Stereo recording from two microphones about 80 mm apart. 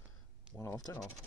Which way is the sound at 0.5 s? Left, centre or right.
Centre.